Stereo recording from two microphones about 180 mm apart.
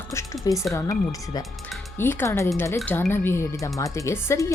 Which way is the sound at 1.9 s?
10° left (ahead or behind).